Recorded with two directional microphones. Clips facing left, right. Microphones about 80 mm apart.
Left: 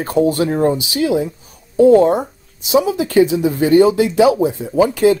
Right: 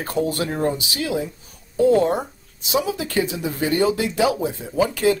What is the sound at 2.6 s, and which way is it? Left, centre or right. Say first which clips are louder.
Speech: left 8 dB; centre.